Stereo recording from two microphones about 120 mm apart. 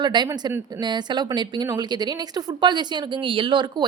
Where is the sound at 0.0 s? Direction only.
35° right (ahead or behind).